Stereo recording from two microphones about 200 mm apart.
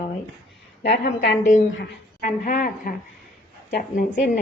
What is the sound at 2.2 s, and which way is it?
Speech, 40° left (ahead or behind).